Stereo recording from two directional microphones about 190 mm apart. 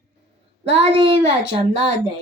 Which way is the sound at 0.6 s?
30° right (ahead or behind).